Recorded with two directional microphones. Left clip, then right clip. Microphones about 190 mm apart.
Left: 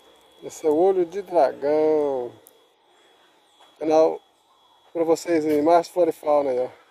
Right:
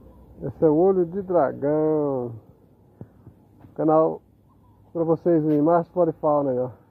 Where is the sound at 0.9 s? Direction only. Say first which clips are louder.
Right 1 dB; 20° left (ahead or behind).